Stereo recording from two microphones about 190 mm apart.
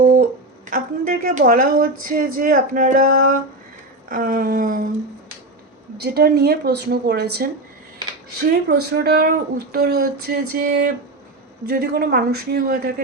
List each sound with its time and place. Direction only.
0.0 s a sound: 45° right (ahead or behind)
0.7 s a woman's voice: 50° right (ahead or behind)
6.0 s speech: 55° right (ahead or behind)